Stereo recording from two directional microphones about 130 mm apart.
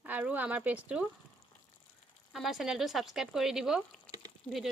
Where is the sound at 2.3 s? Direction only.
Centre (ahead or behind).